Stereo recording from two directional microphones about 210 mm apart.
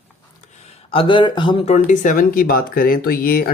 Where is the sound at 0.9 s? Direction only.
25° left (ahead or behind).